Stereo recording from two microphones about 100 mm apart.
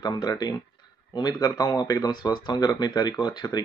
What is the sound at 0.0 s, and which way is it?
Speech, 40° left (ahead or behind).